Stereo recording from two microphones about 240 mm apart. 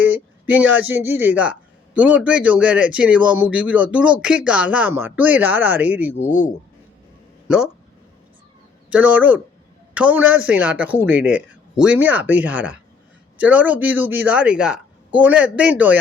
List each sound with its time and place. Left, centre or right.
0.0 s speech: centre
7.4 s speech: centre
8.9 s speech: centre